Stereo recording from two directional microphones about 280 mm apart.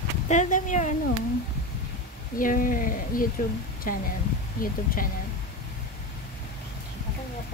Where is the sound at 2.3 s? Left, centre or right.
Left.